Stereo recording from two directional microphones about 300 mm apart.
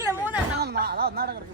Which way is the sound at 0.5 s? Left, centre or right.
Right.